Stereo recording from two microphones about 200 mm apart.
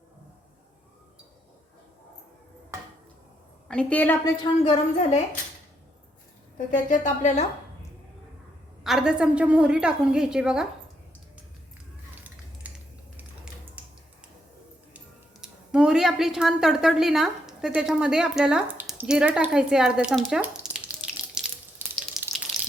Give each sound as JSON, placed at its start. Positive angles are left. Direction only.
{"t": 3.7, "sound": "a woman's voice", "side_deg": 5}
{"t": 4.6, "sound": "a woman's voice", "side_deg": 30}
{"t": 6.9, "sound": "a woman's voice", "side_deg": 35}
{"t": 8.8, "sound": "a woman's voice", "side_deg": 0}
{"t": 12.7, "sound": "a sound", "side_deg": -5}
{"t": 14.9, "sound": "a sound", "side_deg": -5}